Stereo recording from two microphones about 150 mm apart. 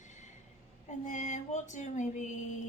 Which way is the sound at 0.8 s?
50° left (ahead or behind).